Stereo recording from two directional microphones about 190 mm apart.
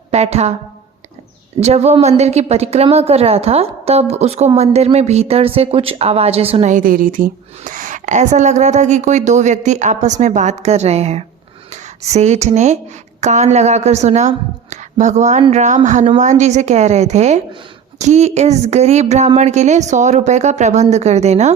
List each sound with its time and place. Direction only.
0.1 s a woman's voice: 35° right (ahead or behind)
1.6 s speech: 35° right (ahead or behind)